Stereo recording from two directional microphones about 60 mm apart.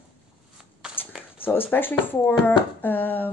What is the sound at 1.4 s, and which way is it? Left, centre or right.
Speech, left.